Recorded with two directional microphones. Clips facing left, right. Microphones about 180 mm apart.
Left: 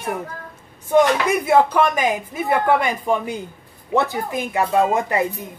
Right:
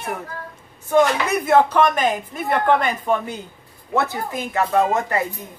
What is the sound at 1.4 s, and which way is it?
Speech, 10° left (ahead or behind).